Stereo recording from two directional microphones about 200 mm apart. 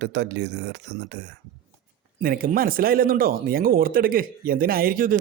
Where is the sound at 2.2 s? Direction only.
45° right (ahead or behind).